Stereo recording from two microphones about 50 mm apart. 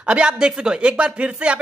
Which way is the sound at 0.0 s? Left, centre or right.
Centre.